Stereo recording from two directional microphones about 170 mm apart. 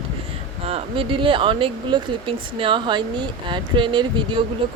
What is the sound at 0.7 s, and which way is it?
Speech, 35° right (ahead or behind).